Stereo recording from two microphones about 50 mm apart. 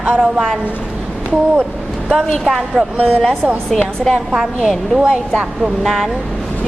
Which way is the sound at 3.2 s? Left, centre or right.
Centre.